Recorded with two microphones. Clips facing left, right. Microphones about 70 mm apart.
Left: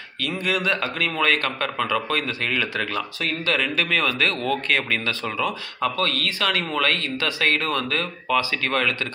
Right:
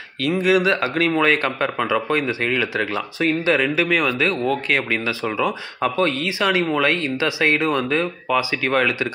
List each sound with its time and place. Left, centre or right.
0.2 s speech: centre